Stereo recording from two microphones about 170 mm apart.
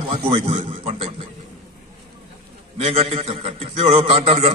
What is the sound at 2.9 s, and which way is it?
Speech, 35° right (ahead or behind).